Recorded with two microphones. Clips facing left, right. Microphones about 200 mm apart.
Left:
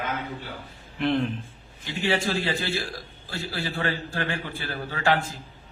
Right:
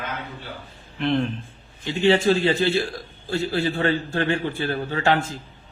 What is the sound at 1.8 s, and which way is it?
A man's voice, 25° right (ahead or behind).